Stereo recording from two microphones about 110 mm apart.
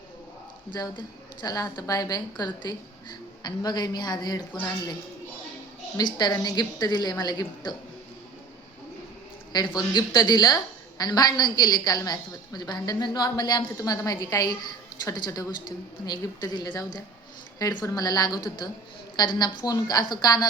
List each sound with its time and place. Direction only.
0.7 s a woman's voice: 40° left (ahead or behind)
6.0 s a woman's voice: 40° left (ahead or behind)
9.5 s a woman's voice: 40° left (ahead or behind)